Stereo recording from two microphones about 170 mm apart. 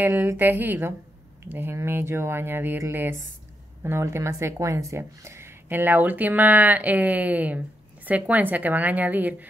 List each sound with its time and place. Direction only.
0.0 s speech: 10° right (ahead or behind)